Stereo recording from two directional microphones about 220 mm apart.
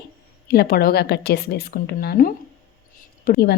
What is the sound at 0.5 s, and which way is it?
Speech, 45° left (ahead or behind).